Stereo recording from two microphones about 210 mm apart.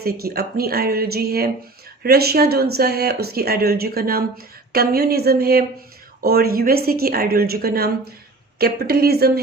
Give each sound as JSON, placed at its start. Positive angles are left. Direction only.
{"t": 0.0, "sound": "a woman's voice", "side_deg": -45}